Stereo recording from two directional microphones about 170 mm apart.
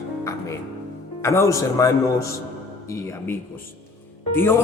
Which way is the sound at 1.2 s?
15° left (ahead or behind).